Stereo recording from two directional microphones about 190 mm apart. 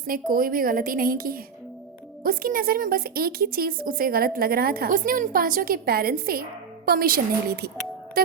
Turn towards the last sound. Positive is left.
turn(degrees=-55)  # may be behind; listen again after turning